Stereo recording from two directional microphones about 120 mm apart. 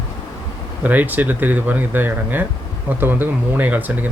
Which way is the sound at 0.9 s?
15° right (ahead or behind).